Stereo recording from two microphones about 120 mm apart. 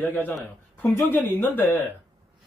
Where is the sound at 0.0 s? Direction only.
15° left (ahead or behind).